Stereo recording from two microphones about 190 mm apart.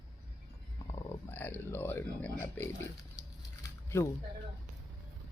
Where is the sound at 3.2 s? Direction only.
15° left (ahead or behind).